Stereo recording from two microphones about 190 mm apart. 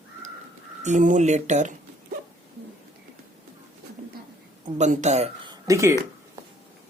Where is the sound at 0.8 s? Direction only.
40° right (ahead or behind).